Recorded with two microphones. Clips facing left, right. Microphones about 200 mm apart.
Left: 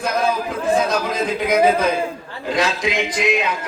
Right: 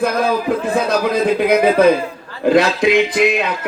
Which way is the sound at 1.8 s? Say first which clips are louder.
Right 8 dB; 60° right (ahead or behind).